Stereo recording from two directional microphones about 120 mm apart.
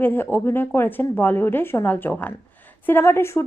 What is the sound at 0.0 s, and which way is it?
A woman's voice, 15° left (ahead or behind).